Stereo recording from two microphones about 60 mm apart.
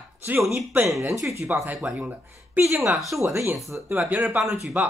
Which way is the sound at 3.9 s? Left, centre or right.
Right.